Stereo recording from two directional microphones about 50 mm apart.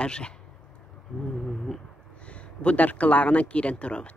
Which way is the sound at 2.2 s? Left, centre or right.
Left.